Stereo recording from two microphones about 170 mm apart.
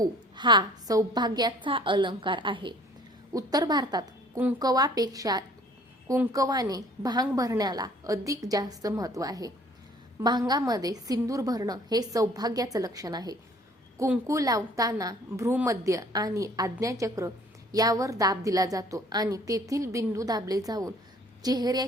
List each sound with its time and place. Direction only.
0.0 s a woman's voice: 25° right (ahead or behind)